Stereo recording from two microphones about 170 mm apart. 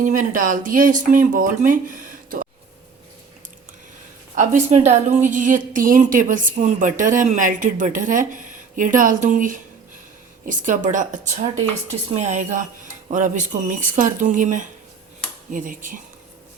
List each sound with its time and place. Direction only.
0.0 s a woman's voice: 50° right (ahead or behind)
4.4 s a woman's voice: 45° right (ahead or behind)